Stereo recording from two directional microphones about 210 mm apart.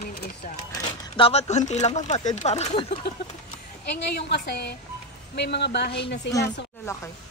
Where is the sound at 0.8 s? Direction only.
20° left (ahead or behind).